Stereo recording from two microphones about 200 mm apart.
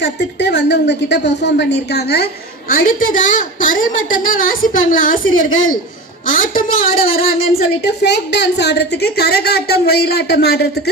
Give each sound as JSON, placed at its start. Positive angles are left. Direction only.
{"t": 0.0, "sound": "a woman's voice", "side_deg": 60}
{"t": 5.2, "sound": "a woman's voice", "side_deg": 85}
{"t": 6.2, "sound": "a woman's voice", "side_deg": 45}
{"t": 7.6, "sound": "a woman's voice", "side_deg": 60}